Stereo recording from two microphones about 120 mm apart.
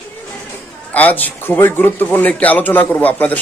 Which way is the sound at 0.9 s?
15° left (ahead or behind).